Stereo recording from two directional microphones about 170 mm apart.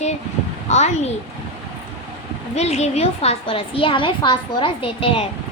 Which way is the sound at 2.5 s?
40° left (ahead or behind).